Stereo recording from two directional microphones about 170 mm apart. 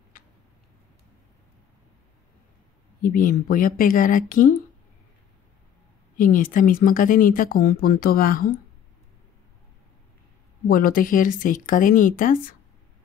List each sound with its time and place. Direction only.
3.0 s speech: 55° left (ahead or behind)
6.1 s speech: 55° left (ahead or behind)
10.7 s speech: 55° left (ahead or behind)